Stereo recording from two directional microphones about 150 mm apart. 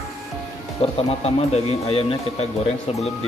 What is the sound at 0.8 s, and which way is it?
Speech, 40° left (ahead or behind).